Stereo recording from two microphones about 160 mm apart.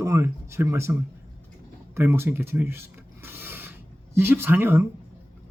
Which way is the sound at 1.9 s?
15° right (ahead or behind).